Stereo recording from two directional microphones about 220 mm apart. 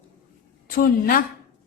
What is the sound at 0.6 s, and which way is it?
Speech, 40° left (ahead or behind).